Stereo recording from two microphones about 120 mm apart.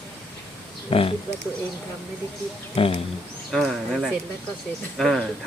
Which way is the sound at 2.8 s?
50° left (ahead or behind).